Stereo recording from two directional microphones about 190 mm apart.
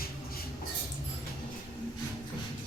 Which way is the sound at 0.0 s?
50° left (ahead or behind).